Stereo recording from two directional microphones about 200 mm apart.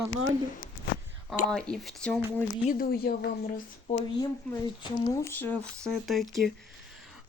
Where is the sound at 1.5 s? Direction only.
5° left (ahead or behind).